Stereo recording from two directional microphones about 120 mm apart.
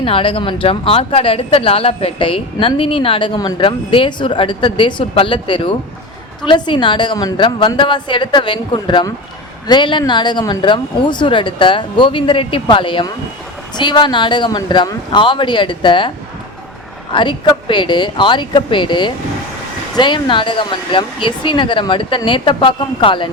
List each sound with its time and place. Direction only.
0.0 s speech: 50° left (ahead or behind)